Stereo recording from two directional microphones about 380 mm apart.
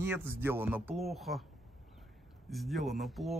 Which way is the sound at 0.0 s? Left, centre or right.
Centre.